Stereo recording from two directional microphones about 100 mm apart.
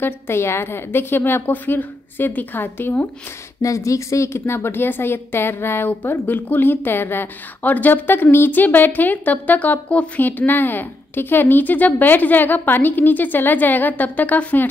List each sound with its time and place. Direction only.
0.0 s a woman's voice: 25° left (ahead or behind)
3.6 s a woman's voice: 30° left (ahead or behind); by 14.7 s 15° left (ahead or behind)